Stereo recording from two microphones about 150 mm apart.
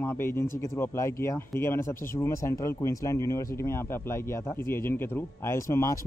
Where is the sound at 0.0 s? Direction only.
15° left (ahead or behind).